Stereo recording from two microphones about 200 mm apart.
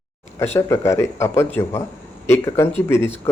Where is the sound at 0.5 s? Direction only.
15° left (ahead or behind).